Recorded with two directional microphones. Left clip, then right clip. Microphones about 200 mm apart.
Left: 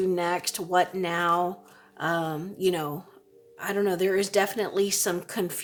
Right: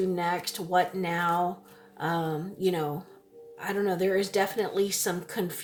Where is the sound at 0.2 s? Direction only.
35° left (ahead or behind).